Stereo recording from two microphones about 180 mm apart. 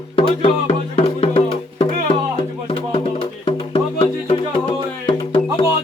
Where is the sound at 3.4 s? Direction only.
30° left (ahead or behind).